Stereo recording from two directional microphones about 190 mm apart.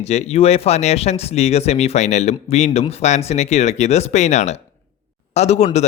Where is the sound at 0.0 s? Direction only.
35° left (ahead or behind).